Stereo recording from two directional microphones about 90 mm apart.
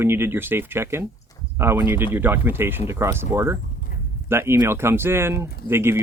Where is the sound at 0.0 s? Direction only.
25° right (ahead or behind).